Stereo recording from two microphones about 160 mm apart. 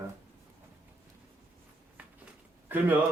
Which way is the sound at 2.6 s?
10° right (ahead or behind).